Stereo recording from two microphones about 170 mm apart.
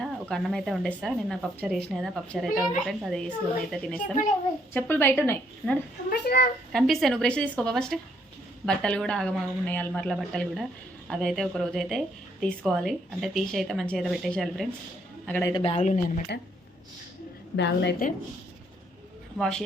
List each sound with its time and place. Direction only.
0.0 s a woman's voice: centre (ahead or behind)
6.1 s a child's voice: 65° left (ahead or behind)
6.7 s speech: centre (ahead or behind)
15.3 s a woman's voice: 15° left (ahead or behind)
15.5 s speech: 35° left (ahead or behind); by 16.2 s 50° left (ahead or behind)
17.6 s a woman's voice: 90° left
19.4 s speech: 5° left (ahead or behind)